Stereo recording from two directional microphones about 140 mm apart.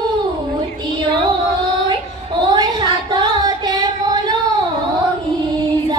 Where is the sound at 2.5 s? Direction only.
30° right (ahead or behind).